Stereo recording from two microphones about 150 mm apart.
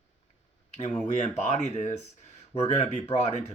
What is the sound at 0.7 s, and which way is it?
Speech, 50° left (ahead or behind).